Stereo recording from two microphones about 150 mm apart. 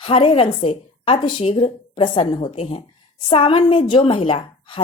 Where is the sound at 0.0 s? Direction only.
35° left (ahead or behind).